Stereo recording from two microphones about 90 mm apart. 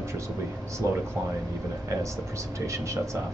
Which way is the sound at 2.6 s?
35° right (ahead or behind).